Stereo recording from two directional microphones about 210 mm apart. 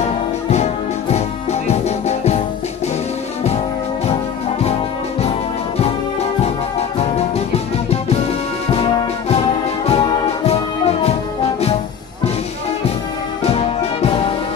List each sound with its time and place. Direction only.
0.5 s music: 30° left (ahead or behind)
4.1 s music: 30° left (ahead or behind)
7.0 s music: 30° left (ahead or behind)
9.8 s music: 20° left (ahead or behind)
13.4 s music: 30° left (ahead or behind)